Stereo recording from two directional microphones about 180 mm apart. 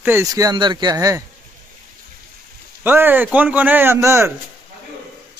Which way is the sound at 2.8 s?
10° right (ahead or behind).